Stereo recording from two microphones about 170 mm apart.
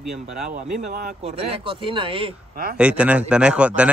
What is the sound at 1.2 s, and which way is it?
Speech, 35° right (ahead or behind).